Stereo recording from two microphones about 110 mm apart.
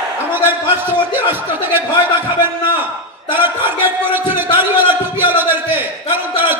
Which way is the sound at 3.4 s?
20° right (ahead or behind).